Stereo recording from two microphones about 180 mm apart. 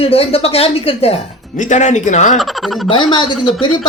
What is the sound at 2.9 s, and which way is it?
Speech, 25° left (ahead or behind).